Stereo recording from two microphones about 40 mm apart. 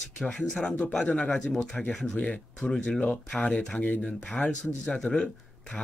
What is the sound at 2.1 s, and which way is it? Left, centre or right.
Speech, left.